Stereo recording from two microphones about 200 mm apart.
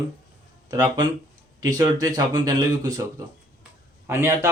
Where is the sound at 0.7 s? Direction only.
20° right (ahead or behind).